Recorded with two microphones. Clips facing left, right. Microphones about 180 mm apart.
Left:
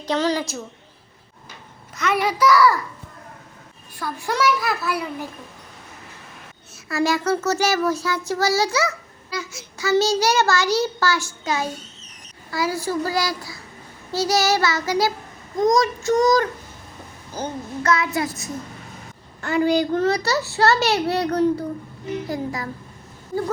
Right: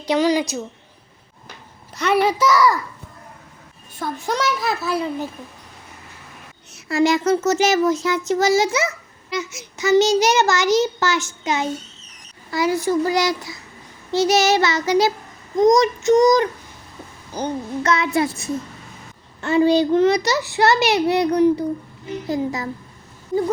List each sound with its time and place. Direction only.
0.0 s a child's voice: 10° right (ahead or behind)
2.2 s child singing: 25° right (ahead or behind)
3.9 s child singing: 20° right (ahead or behind)
6.8 s child singing: 25° right (ahead or behind)
17.3 s a child's voice: 15° right (ahead or behind)
17.9 s child singing: 25° right (ahead or behind)
19.4 s a child's voice: 25° right (ahead or behind)
22.3 s child singing: 25° right (ahead or behind)